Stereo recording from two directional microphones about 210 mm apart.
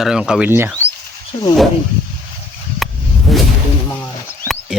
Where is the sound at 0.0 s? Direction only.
5° right (ahead or behind).